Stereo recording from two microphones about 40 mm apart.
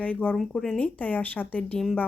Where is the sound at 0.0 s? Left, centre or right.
Left.